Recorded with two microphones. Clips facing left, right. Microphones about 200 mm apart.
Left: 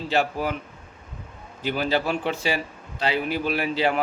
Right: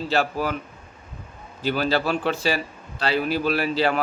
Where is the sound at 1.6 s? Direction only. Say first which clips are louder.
Right 1 dB; 15° left (ahead or behind).